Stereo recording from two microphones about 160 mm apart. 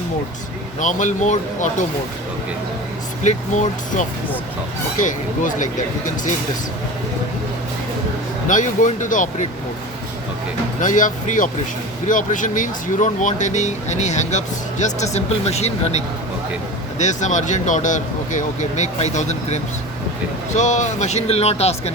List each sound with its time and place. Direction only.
0.8 s speech: 50° left (ahead or behind)
3.2 s speech: 50° left (ahead or behind)
8.4 s speech: 55° left (ahead or behind)
10.8 s speech: 55° left (ahead or behind)